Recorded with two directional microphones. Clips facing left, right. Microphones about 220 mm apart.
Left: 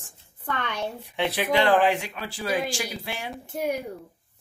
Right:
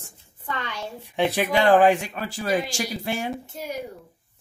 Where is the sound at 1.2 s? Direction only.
45° right (ahead or behind).